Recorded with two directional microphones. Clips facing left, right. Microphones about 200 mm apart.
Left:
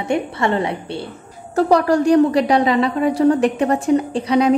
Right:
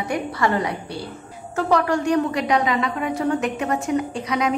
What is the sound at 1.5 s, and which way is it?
A woman's voice, 35° left (ahead or behind).